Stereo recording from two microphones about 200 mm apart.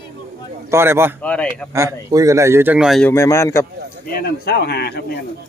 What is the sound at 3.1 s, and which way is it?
Speech, 15° left (ahead or behind).